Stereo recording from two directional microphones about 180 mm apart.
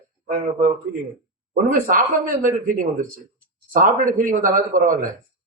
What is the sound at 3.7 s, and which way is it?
Speech, 50° right (ahead or behind).